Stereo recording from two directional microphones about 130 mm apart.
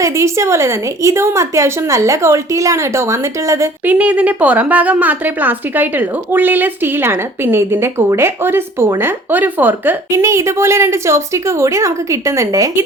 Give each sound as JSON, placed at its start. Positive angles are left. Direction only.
{"t": 0.0, "sound": "a woman's voice", "side_deg": -20}
{"t": 3.9, "sound": "a woman's voice", "side_deg": -10}